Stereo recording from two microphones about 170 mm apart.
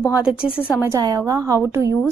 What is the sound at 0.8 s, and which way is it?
A woman's voice, 20° right (ahead or behind).